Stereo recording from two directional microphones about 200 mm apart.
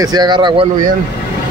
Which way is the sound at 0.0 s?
20° right (ahead or behind).